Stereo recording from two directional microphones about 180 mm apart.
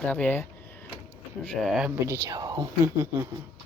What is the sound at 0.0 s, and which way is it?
Speech, 10° left (ahead or behind).